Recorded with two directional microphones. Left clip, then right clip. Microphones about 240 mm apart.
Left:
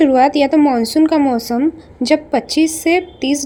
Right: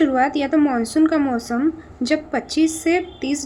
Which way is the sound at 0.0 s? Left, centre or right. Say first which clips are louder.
Left 7 dB; left.